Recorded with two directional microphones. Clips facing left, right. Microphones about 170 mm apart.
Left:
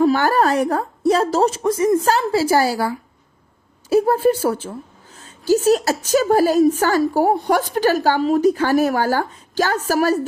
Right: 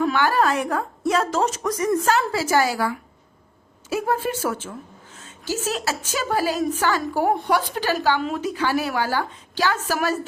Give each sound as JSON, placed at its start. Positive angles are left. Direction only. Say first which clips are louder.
{"t": 0.0, "sound": "a woman's voice", "louder": "left 4 dB", "side_deg": 40}